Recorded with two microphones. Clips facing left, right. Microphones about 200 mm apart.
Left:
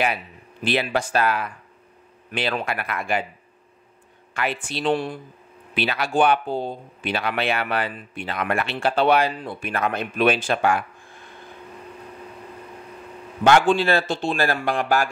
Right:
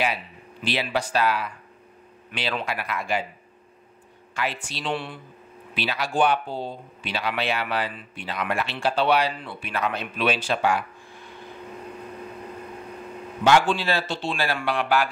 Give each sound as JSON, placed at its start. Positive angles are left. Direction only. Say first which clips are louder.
{"t": 0.0, "sound": "speech", "louder": "left 2 dB", "side_deg": 50}
{"t": 4.3, "sound": "speech", "louder": "left 3 dB", "side_deg": 55}
{"t": 5.8, "sound": "speech", "louder": "left 3 dB", "side_deg": 55}
{"t": 13.4, "sound": "speech", "louder": "left 3 dB", "side_deg": 50}